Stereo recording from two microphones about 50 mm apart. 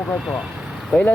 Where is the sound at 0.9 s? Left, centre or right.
Left.